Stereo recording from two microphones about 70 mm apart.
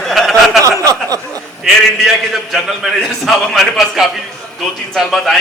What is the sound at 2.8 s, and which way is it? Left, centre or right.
A man's voice, centre.